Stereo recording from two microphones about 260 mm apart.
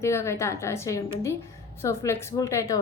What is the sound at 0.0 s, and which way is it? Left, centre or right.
A woman's voice, centre.